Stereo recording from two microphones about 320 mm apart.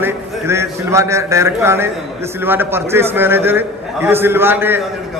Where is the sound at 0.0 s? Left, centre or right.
Centre.